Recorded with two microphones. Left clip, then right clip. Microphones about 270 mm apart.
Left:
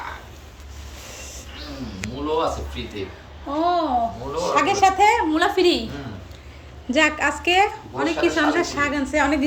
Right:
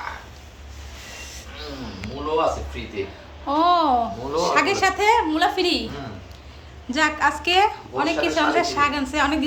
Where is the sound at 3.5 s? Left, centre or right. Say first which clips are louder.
Right 3 dB; centre.